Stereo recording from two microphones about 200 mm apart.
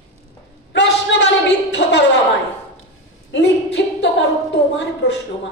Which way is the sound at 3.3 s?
65° left (ahead or behind).